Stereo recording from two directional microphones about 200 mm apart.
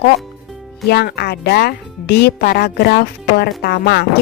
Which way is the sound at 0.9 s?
50° left (ahead or behind).